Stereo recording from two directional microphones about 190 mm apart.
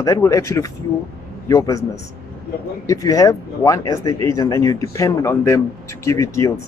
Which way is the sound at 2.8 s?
15° left (ahead or behind).